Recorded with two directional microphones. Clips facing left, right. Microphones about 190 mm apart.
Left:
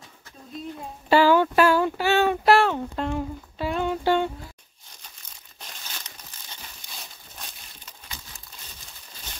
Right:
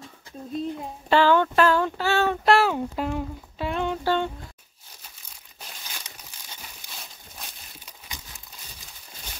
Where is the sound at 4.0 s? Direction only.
15° left (ahead or behind).